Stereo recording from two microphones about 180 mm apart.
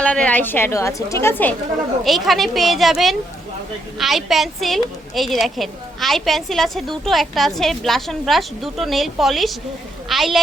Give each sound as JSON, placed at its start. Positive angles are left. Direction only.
{"t": 0.0, "sound": "a woman's voice", "side_deg": 5}
{"t": 2.0, "sound": "a woman's voice", "side_deg": 0}